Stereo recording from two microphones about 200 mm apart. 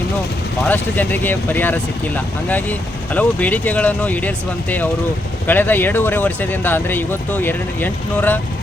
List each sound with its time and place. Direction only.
0.7 s speech: 10° left (ahead or behind)